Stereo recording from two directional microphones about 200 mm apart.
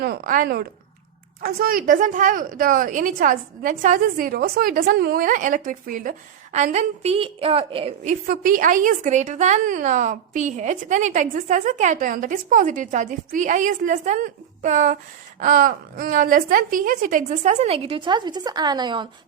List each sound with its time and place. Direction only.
0.0 s a woman's voice: 45° right (ahead or behind); by 8.1 s 30° right (ahead or behind)
8.3 s a woman's voice: 45° right (ahead or behind); by 19.0 s 20° right (ahead or behind)